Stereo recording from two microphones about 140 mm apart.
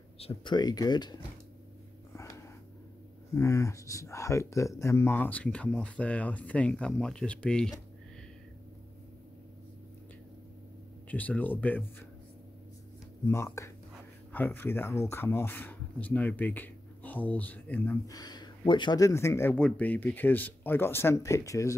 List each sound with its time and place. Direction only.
0.2 s speech: 40° left (ahead or behind)
2.1 s a sound: 20° left (ahead or behind)
3.3 s speech: 20° left (ahead or behind); by 7.7 s 5° left (ahead or behind)
11.1 s speech: 10° left (ahead or behind)
13.3 s speech: 20° left (ahead or behind)
18.0 s speech: 30° left (ahead or behind)